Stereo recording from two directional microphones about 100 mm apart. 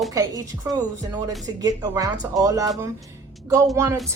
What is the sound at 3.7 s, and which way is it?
Speech, 30° right (ahead or behind).